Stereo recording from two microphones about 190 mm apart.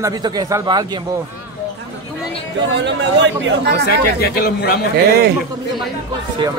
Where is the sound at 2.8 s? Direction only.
70° right (ahead or behind).